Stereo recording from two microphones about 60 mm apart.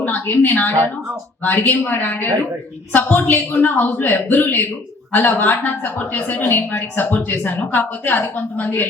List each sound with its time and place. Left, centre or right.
0.0 s a woman's voice: left